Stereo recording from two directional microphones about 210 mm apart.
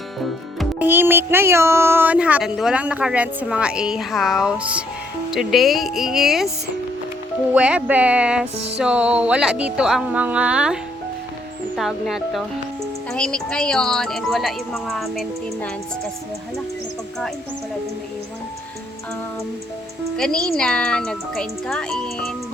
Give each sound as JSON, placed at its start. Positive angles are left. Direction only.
{"t": 0.6, "sound": "speech", "side_deg": -10}
{"t": 7.5, "sound": "speech", "side_deg": -5}
{"t": 8.5, "sound": "music", "side_deg": -30}
{"t": 8.8, "sound": "speech", "side_deg": -5}
{"t": 11.8, "sound": "speech", "side_deg": 0}
{"t": 20.1, "sound": "speech", "side_deg": 5}